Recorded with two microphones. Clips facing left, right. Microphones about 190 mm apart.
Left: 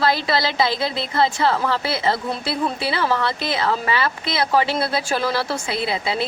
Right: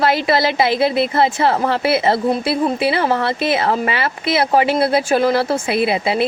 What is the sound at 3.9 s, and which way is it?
Speech, 20° right (ahead or behind).